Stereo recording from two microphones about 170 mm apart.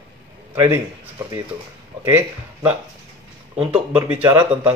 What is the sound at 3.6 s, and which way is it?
Speech, 10° right (ahead or behind).